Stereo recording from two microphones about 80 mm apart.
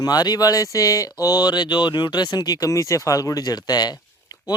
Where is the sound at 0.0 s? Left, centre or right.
Left.